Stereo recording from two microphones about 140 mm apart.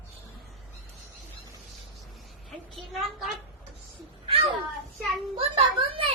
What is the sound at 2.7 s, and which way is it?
Speech, centre (ahead or behind).